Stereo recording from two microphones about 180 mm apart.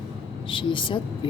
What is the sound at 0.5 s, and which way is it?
Speech, 30° left (ahead or behind).